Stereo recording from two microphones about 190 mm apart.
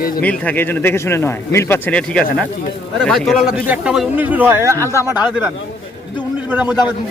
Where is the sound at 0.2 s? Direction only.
10° left (ahead or behind); by 4.8 s 15° right (ahead or behind).